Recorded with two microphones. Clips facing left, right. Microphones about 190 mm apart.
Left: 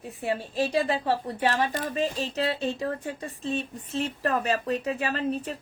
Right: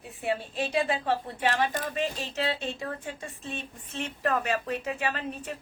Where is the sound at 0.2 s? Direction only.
40° left (ahead or behind).